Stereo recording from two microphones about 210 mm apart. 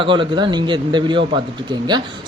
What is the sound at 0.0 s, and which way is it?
Speech, 25° right (ahead or behind).